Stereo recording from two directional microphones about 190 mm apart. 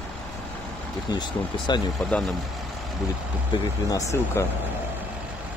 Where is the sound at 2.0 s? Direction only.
Centre (ahead or behind).